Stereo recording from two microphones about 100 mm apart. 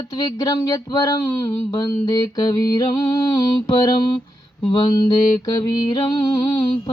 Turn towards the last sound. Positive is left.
turn(degrees=45)  # may be behind; listen again after turning